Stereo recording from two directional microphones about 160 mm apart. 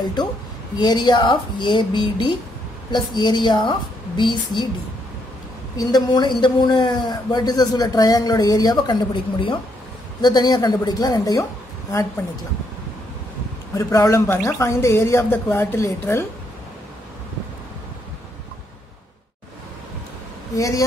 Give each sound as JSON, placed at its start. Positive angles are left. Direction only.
{"t": 0.7, "sound": "a man's voice", "side_deg": 25}
{"t": 5.8, "sound": "a man's voice", "side_deg": 25}
{"t": 13.7, "sound": "speech", "side_deg": 20}
{"t": 20.5, "sound": "a man's voice", "side_deg": 20}